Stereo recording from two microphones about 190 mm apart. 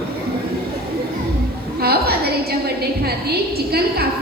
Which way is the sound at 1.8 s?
55° right (ahead or behind).